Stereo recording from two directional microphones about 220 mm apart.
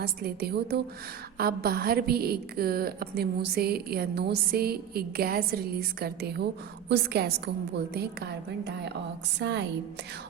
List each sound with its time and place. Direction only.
0.0 s a woman's voice: 45° right (ahead or behind)